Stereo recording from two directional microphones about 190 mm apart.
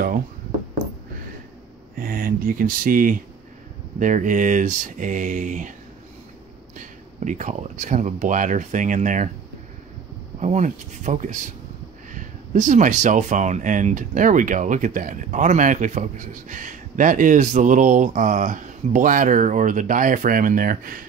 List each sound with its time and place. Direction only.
2.0 s speech: 50° right (ahead or behind)
6.8 s speech: 40° right (ahead or behind)
10.4 s speech: 40° right (ahead or behind)